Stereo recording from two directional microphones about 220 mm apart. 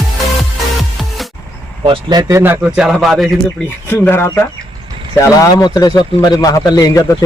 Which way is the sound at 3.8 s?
10° left (ahead or behind).